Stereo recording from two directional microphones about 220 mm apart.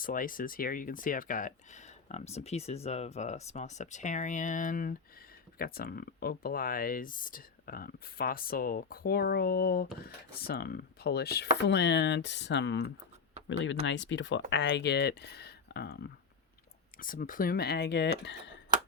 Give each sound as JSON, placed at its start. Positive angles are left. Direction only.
{"t": 0.0, "sound": "speech", "side_deg": 40}